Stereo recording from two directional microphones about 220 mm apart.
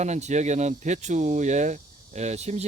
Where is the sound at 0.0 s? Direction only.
30° right (ahead or behind).